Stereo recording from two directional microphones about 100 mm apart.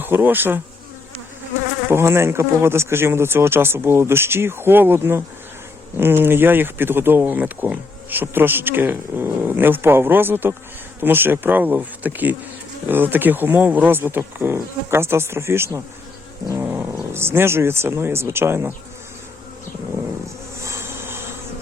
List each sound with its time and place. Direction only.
0.0 s speech: 20° right (ahead or behind)
1.9 s speech: 25° right (ahead or behind)
16.6 s cat: 20° right (ahead or behind)
17.2 s speech: 25° right (ahead or behind)
20.7 s bee: 25° right (ahead or behind)